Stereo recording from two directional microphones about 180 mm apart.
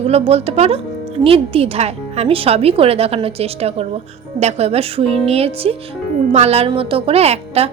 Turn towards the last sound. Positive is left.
turn(degrees=-35)  # may be behind; listen again after turning